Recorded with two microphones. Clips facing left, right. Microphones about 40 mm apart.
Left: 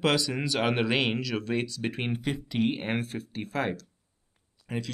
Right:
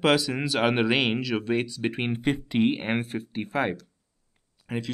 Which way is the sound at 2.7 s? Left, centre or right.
Centre.